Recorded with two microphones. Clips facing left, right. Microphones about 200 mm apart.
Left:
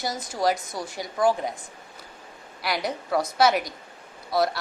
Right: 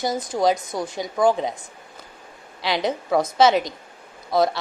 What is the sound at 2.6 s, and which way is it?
A woman's voice, 25° right (ahead or behind).